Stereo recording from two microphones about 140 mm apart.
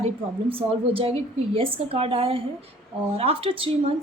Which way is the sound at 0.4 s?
40° right (ahead or behind).